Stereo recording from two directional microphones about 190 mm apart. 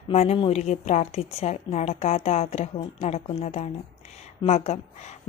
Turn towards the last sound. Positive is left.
turn(degrees=35)  # may be behind; listen again after turning